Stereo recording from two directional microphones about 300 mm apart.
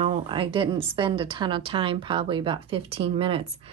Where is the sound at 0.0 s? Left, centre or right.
Centre.